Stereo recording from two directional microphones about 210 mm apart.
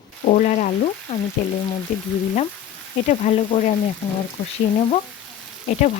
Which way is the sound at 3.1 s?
35° left (ahead or behind).